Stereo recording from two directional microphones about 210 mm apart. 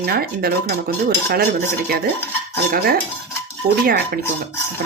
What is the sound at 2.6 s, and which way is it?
Speech, 45° right (ahead or behind).